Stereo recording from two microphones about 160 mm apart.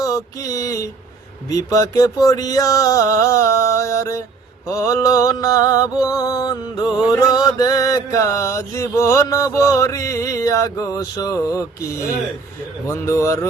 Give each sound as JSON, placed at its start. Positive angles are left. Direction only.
{"t": 0.0, "sound": "mantra", "side_deg": 20}
{"t": 12.9, "sound": "speech", "side_deg": 15}